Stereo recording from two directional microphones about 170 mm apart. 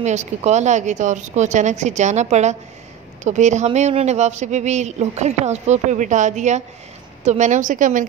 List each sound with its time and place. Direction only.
0.0 s speech: 45° right (ahead or behind)